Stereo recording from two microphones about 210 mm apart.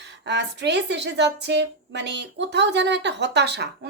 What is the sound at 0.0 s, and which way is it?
A woman's voice, 55° right (ahead or behind).